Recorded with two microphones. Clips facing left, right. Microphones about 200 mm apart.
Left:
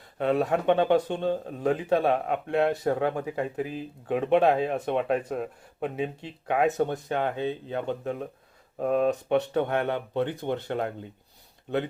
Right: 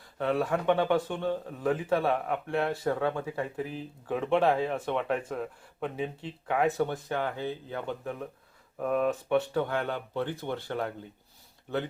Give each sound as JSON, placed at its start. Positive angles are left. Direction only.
{"t": 0.2, "sound": "speech", "side_deg": 20}